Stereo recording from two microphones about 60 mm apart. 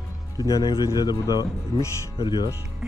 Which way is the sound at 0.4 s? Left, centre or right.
Left.